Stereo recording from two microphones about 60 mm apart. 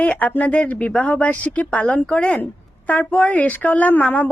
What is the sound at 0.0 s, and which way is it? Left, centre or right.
A woman's voice, left.